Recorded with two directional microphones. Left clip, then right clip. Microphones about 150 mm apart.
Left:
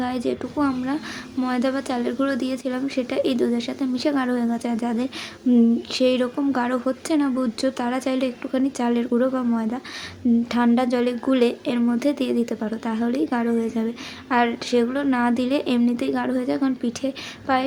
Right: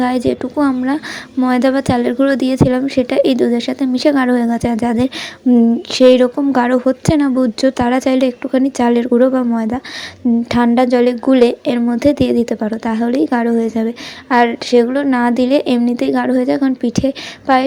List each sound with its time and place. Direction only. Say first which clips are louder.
0.0 s a woman's voice: right 9 dB; 45° right (ahead or behind)
5.5 s speech: right 7 dB; 25° right (ahead or behind)
5.9 s a woman's voice: right 12 dB; 40° right (ahead or behind)